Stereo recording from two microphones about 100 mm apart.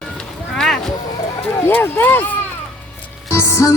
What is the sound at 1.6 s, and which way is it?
Speech, 20° left (ahead or behind).